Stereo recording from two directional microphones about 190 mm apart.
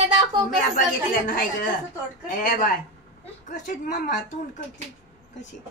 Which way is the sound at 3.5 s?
40° left (ahead or behind).